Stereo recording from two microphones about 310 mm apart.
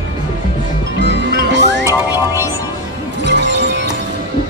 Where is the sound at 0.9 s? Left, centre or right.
Right.